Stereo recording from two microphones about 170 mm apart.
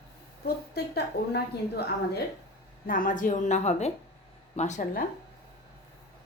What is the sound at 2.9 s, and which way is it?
A woman's voice, 50° left (ahead or behind).